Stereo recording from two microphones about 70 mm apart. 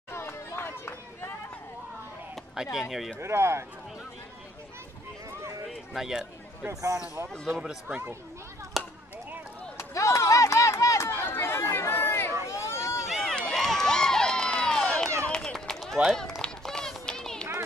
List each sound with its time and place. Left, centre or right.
0.1 s run: left
2.5 s speech: centre
3.2 s speech: right
5.9 s speech: centre
6.7 s speech: right
7.6 s speech: centre
8.8 s chop: centre
9.8 s a sound: left
11.2 s chatter: left
12.4 s run: left
13.2 s crowd: centre
15.2 s run: centre
15.9 s speech: centre
16.2 s run: centre